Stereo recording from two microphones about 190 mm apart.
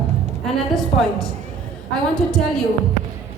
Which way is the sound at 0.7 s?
Centre (ahead or behind).